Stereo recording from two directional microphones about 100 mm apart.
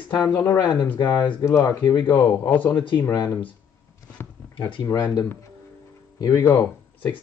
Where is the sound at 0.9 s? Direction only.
40° left (ahead or behind).